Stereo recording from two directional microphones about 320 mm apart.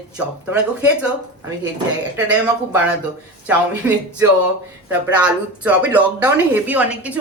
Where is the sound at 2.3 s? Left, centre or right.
Centre.